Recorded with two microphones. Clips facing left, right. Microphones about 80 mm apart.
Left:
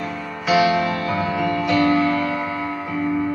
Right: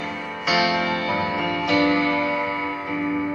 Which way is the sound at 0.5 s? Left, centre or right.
Left.